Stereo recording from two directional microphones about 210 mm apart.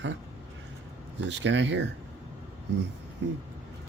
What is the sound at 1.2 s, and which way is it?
Speech, 60° right (ahead or behind).